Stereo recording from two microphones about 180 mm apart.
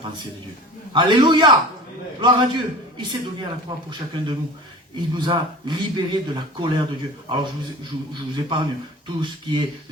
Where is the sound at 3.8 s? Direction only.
25° right (ahead or behind).